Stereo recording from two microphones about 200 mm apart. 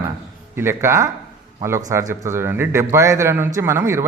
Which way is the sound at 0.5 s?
10° right (ahead or behind).